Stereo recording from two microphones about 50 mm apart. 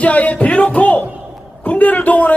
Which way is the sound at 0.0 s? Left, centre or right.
Left.